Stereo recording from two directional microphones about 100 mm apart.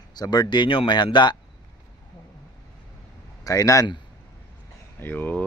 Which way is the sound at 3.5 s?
35° left (ahead or behind).